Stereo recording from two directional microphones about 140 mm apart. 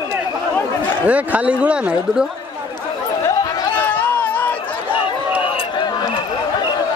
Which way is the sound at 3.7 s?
10° left (ahead or behind).